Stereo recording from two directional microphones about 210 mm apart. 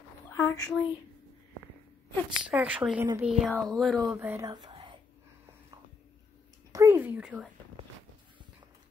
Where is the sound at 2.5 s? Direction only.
5° right (ahead or behind).